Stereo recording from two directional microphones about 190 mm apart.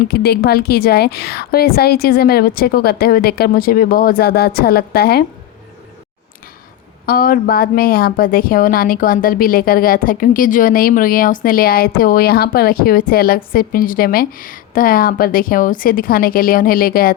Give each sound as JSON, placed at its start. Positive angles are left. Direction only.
{"t": 0.1, "sound": "a woman's voice", "side_deg": 55}
{"t": 7.0, "sound": "a woman's voice", "side_deg": 50}